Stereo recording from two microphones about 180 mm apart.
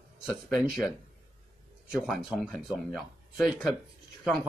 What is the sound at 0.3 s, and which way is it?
Speech, centre (ahead or behind).